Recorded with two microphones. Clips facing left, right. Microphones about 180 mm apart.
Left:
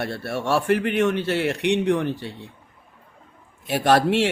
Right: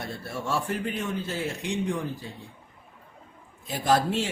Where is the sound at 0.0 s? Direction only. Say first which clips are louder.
Left 7 dB; 75° left (ahead or behind).